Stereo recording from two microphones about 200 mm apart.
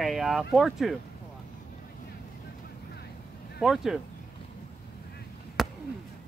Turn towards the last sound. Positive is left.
turn(degrees=0)  # may be behind; listen again after turning